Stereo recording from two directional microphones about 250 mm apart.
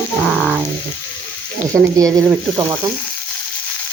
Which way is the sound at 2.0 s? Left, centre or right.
Centre.